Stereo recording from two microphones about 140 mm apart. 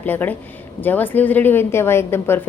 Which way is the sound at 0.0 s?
15° left (ahead or behind).